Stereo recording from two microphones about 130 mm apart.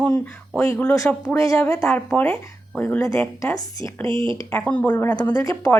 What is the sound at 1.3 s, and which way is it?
Speech, 25° left (ahead or behind).